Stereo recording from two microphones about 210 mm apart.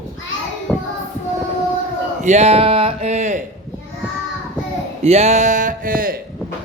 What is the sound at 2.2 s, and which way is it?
Speech, 30° right (ahead or behind).